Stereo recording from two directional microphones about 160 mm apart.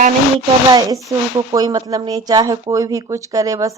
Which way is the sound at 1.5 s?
25° right (ahead or behind).